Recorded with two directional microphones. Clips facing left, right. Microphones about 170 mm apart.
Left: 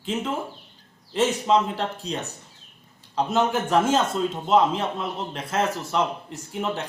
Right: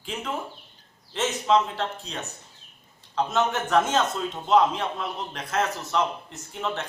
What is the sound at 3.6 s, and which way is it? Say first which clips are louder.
A man's voice: left 2 dB; 10° left (ahead or behind).